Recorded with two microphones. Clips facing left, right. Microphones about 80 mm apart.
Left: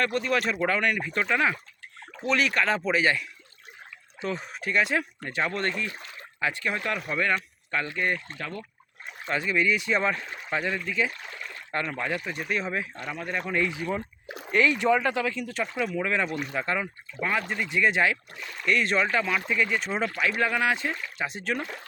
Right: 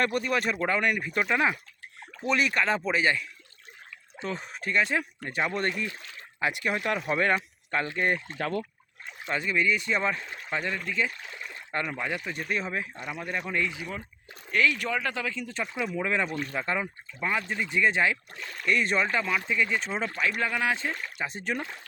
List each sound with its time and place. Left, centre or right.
0.0 s speech: centre
4.9 s speech: centre
9.3 s speech: centre
11.3 s a sound: right
11.7 s speech: centre
12.2 s speech: centre
12.9 s speech: centre
13.5 s speech: centre
14.3 s speech: left
14.5 s speech: left; by 15.7 s centre
16.0 s speech: centre
16.4 s speech: centre
16.6 s speech: centre